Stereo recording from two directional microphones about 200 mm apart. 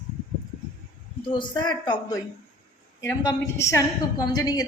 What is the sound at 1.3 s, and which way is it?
A woman's voice, 25° left (ahead or behind).